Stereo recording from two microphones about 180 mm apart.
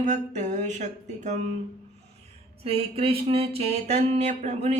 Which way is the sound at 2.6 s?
35° right (ahead or behind).